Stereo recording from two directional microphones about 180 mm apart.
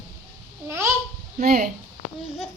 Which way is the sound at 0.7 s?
15° right (ahead or behind).